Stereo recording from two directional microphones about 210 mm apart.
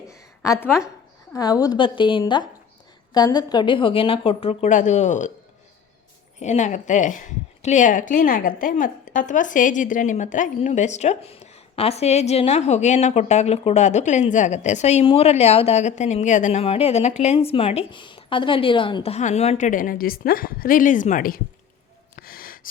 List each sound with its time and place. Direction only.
0.1 s a sound: 15° left (ahead or behind)
1.3 s a woman's voice: 15° left (ahead or behind); by 5.3 s 35° left (ahead or behind)
6.4 s a woman's voice: 35° left (ahead or behind)
22.1 s gasp: 45° left (ahead or behind)